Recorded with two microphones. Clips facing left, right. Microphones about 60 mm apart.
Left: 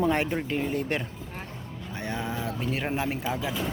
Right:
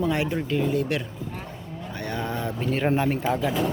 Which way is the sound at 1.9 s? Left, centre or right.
Centre.